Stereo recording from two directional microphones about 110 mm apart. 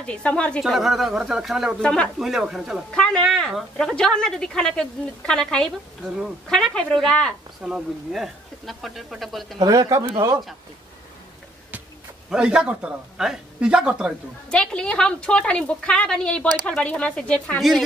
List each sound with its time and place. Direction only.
0.0 s a woman's voice: 10° left (ahead or behind)
0.7 s speech: centre (ahead or behind)
1.8 s a woman's voice: 10° left (ahead or behind)
2.1 s speech: 5° right (ahead or behind)
2.9 s a woman's voice: 5° left (ahead or behind)
9.6 s speech: 35° right (ahead or behind)
12.3 s speech: 10° right (ahead or behind)
14.5 s a woman's voice: 10° left (ahead or behind)
17.6 s speech: centre (ahead or behind)